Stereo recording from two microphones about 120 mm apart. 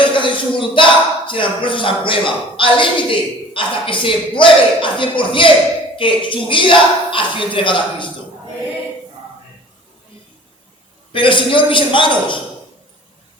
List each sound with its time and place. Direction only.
0.0 s a sound: 45° left (ahead or behind)
1.3 s a man's voice: 45° left (ahead or behind)
11.1 s a man's voice: 45° left (ahead or behind)